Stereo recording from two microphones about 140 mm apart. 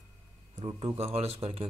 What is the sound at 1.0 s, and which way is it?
Speech, 45° right (ahead or behind).